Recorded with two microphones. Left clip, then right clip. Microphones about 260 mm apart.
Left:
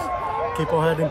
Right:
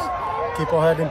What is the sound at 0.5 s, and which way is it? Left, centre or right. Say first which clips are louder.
Speech: right 4 dB; centre.